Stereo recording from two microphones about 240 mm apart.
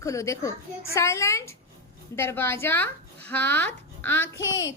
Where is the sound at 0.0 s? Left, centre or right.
Centre.